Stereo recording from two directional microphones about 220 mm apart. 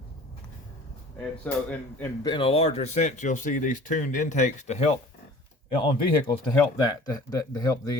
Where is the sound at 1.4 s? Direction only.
5° left (ahead or behind).